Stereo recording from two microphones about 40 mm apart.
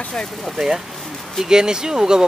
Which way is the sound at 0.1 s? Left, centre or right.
Centre.